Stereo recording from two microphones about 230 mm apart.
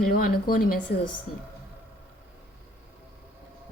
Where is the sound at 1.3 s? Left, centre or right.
Left.